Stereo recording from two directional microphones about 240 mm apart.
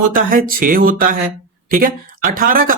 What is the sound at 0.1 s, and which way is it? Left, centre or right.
Speech, right.